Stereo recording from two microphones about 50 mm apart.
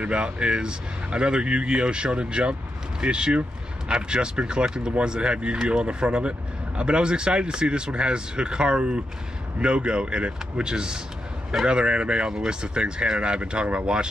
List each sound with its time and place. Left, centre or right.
0.0 s speech: right